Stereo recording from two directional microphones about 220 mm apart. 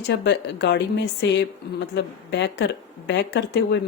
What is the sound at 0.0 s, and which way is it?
Speech, 50° left (ahead or behind).